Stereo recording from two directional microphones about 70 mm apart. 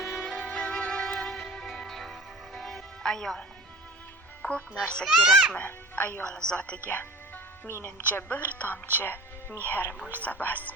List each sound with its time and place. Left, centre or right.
0.1 s music: centre
4.4 s speech: centre
5.0 s speech: centre
5.5 s a woman's voice: left
7.6 s a woman's voice: left